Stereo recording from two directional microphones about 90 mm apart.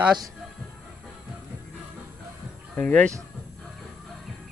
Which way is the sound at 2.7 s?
15° left (ahead or behind).